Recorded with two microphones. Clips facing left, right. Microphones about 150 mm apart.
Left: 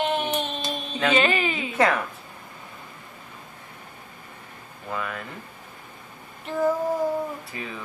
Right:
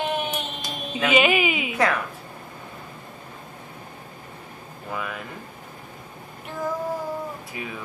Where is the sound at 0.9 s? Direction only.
10° right (ahead or behind).